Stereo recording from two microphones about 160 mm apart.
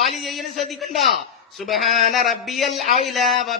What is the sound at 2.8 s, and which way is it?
Speech, 45° left (ahead or behind).